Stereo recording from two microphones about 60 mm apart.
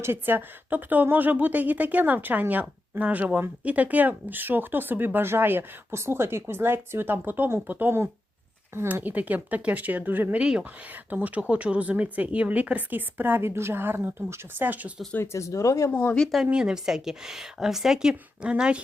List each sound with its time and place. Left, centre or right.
0.0 s a woman's voice: right
8.7 s speech: right
9.0 s a woman's voice: right
10.3 s a woman's voice: centre
15.2 s speech: left
15.9 s speech: left
16.5 s a woman's voice: centre